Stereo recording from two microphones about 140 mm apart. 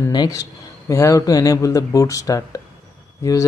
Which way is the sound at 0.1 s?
30° left (ahead or behind).